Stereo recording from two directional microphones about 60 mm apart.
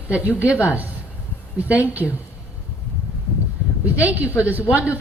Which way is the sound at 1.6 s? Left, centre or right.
Right.